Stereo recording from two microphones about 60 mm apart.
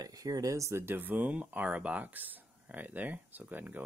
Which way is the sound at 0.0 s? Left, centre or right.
Right.